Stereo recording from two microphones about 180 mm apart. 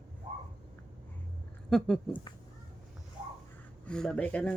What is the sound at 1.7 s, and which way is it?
Speech, 5° left (ahead or behind).